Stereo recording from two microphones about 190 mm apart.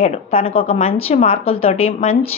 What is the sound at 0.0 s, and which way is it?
A woman's voice, 35° left (ahead or behind).